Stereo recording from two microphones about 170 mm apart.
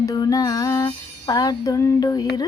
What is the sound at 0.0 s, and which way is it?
Music, 20° left (ahead or behind).